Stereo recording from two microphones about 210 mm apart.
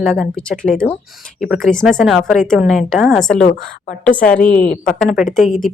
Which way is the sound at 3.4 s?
35° left (ahead or behind).